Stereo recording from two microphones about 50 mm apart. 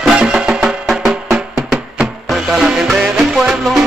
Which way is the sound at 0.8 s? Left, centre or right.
Centre.